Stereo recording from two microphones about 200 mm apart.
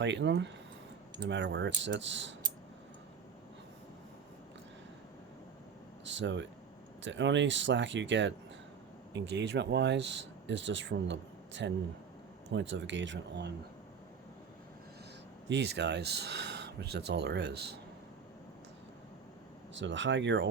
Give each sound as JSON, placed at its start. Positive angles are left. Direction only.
{"t": 0.0, "sound": "speech", "side_deg": -65}
{"t": 6.1, "sound": "speech", "side_deg": -65}
{"t": 15.4, "sound": "speech", "side_deg": -60}
{"t": 19.7, "sound": "speech", "side_deg": -65}